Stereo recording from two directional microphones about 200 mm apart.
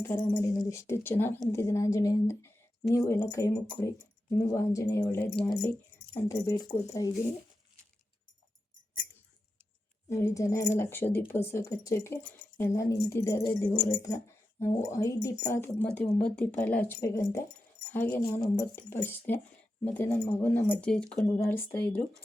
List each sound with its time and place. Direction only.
0.0 s speech: 10° left (ahead or behind)
10.1 s speech: 15° left (ahead or behind)
18.2 s speech: 20° left (ahead or behind)